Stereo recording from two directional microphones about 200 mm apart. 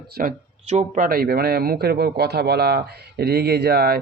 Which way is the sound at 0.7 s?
35° right (ahead or behind).